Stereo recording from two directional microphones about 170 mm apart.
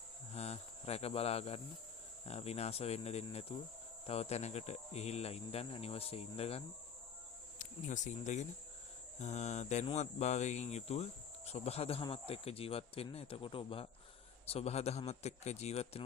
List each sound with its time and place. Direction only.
0.3 s cricket: 40° left (ahead or behind)
2.2 s speech: 35° left (ahead or behind)
7.6 s speech: 45° left (ahead or behind)